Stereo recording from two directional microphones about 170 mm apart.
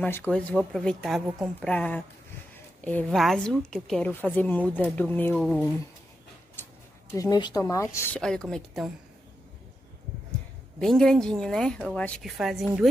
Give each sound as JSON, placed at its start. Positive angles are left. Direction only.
{"t": 0.0, "sound": "a woman's voice", "side_deg": 10}
{"t": 7.2, "sound": "a woman's voice", "side_deg": 25}
{"t": 8.2, "sound": "a woman's voice", "side_deg": 5}
{"t": 10.8, "sound": "a woman's voice", "side_deg": 5}